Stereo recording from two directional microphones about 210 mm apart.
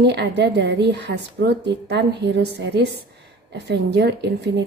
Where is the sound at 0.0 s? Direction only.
55° right (ahead or behind).